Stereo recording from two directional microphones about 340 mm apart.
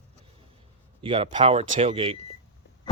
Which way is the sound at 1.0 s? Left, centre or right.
Centre.